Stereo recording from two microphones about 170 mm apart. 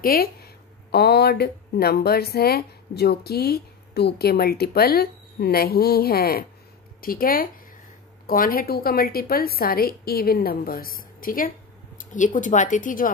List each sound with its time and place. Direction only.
0.0 s a woman's voice: 60° left (ahead or behind)
0.9 s a woman's voice: 70° left (ahead or behind); by 11.5 s 55° left (ahead or behind)
12.0 s a sound: 50° left (ahead or behind)
12.4 s a woman's voice: 50° left (ahead or behind)